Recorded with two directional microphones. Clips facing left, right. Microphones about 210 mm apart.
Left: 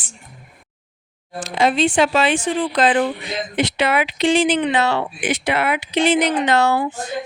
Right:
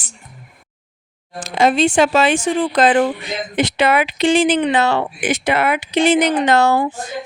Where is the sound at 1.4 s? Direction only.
45° right (ahead or behind).